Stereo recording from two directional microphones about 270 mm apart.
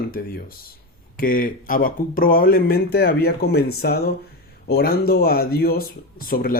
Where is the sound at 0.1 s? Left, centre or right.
Left.